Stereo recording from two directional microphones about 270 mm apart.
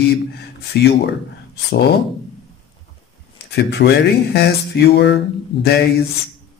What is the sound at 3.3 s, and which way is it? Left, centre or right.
Speech, left.